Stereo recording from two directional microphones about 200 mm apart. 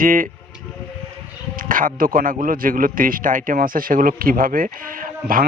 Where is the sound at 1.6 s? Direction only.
45° right (ahead or behind).